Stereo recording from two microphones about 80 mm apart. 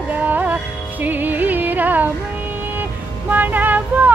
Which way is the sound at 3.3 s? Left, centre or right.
Right.